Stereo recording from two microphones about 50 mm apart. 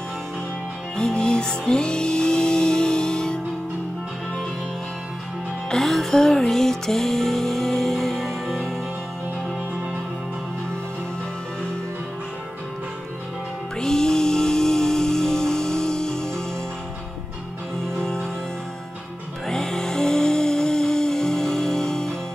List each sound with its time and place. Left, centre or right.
0.9 s music: centre
5.7 s music: centre
13.7 s music: centre
17.8 s music: centre
19.4 s music: centre